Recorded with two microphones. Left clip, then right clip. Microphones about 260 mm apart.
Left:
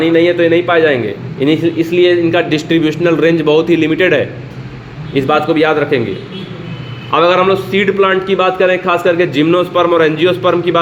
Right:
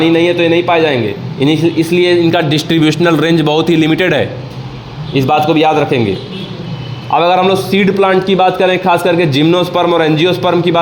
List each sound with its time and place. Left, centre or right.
0.0 s a man's voice: right
5.1 s a man's voice: centre
7.1 s a man's voice: right